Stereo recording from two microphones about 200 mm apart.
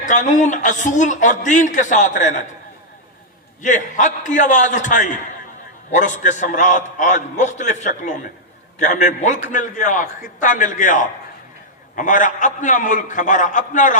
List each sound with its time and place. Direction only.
0.0 s a man's voice: 40° left (ahead or behind)
3.6 s a man's voice: 40° left (ahead or behind)